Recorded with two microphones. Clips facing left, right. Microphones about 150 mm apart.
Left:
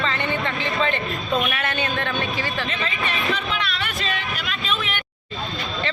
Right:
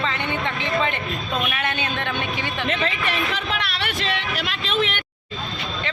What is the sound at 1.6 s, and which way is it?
Speech, 15° right (ahead or behind).